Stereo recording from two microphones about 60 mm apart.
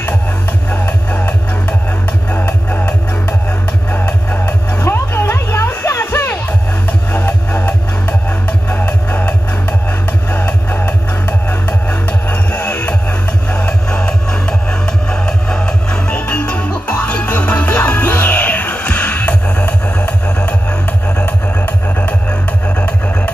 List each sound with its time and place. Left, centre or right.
0.7 s music: left
3.9 s music: left
4.5 s music: left
13.5 s music: centre